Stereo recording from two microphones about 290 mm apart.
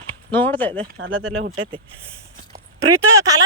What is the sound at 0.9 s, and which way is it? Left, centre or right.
Speech, right.